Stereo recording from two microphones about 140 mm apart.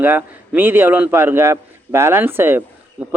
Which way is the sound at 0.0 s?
15° right (ahead or behind).